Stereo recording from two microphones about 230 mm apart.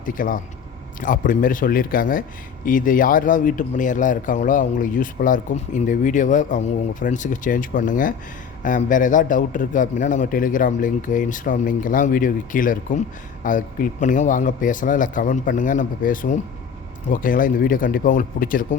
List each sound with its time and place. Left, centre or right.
0.0 s speech: left